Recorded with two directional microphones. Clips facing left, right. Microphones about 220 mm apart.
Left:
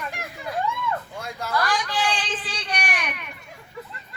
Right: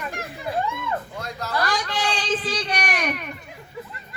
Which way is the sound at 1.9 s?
40° right (ahead or behind).